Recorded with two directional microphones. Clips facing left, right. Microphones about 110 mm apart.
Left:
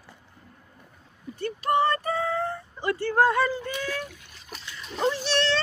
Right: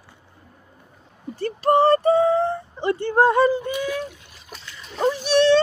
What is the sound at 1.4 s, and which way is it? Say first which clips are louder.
Speech: right 6 dB; 35° right (ahead or behind).